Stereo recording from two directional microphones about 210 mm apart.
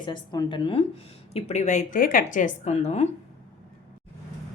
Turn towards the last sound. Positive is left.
turn(degrees=30)  # may be behind; listen again after turning